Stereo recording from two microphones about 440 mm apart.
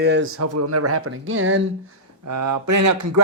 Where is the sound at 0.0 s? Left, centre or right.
Right.